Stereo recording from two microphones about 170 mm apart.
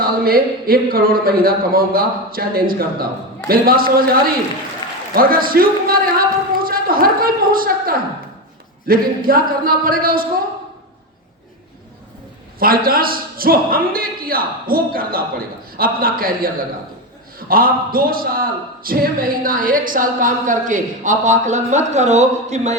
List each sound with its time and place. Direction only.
0.0 s a man's voice: 60° right (ahead or behind)
5.1 s a man's voice: 60° right (ahead or behind)
12.5 s a man's voice: 60° right (ahead or behind); by 22.7 s 40° right (ahead or behind)